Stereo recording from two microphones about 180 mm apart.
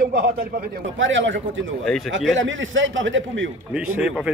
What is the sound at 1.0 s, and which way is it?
Speech, 90° right.